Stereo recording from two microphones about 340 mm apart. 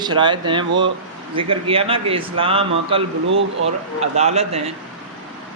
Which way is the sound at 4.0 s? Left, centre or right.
Centre.